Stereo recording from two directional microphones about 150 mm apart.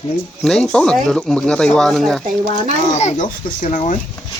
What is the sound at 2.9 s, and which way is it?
Speech, 50° left (ahead or behind).